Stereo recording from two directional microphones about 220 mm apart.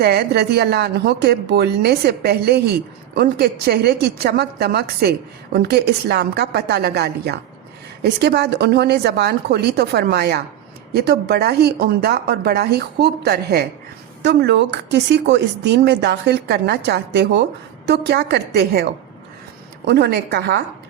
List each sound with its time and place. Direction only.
0.0 s a woman's voice: 45° right (ahead or behind)